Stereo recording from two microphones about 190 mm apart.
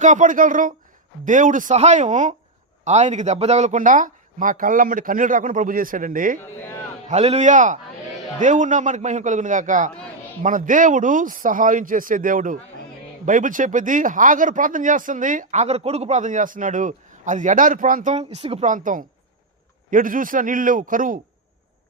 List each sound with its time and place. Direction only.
0.0 s a man's voice: 40° right (ahead or behind)
7.1 s a man's voice: 35° right (ahead or behind)